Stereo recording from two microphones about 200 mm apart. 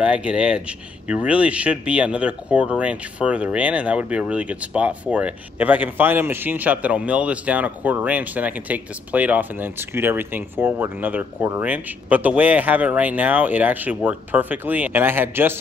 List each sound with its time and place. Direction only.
0.0 s speech: 5° right (ahead or behind)